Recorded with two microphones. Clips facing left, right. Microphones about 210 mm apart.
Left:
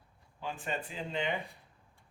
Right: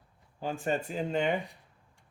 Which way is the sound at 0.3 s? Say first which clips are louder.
Right 7 dB; 40° right (ahead or behind).